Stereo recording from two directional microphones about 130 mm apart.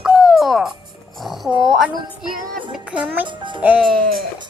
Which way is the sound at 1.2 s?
Centre (ahead or behind).